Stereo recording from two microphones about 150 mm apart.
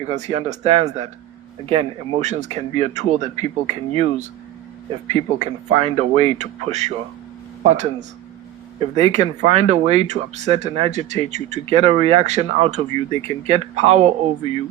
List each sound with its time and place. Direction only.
0.0 s speech: 45° right (ahead or behind)